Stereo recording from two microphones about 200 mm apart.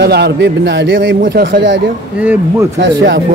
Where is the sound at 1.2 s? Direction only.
45° right (ahead or behind).